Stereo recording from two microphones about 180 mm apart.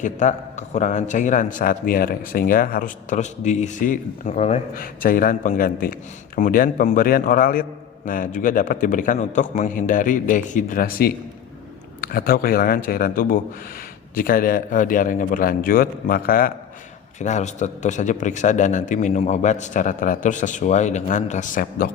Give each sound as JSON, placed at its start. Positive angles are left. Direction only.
{"t": 0.0, "sound": "a man's voice", "side_deg": 40}
{"t": 4.7, "sound": "a man's voice", "side_deg": 50}
{"t": 17.2, "sound": "a man's voice", "side_deg": 40}